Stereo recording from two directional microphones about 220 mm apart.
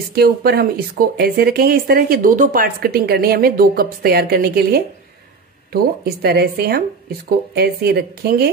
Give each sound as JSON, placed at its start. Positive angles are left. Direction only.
{"t": 0.1, "sound": "speech", "side_deg": -45}